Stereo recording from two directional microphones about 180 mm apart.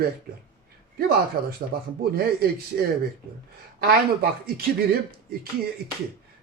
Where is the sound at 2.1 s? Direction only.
55° right (ahead or behind).